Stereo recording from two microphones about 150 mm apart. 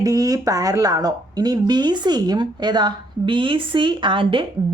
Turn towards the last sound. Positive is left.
turn(degrees=-35)  # may be behind; listen again after turning